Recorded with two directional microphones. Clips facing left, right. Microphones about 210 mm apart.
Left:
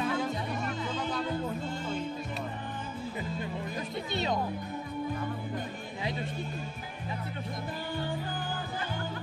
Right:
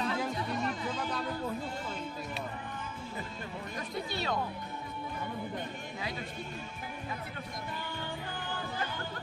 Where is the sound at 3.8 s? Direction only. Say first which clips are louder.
Left 1 dB; 20° left (ahead or behind).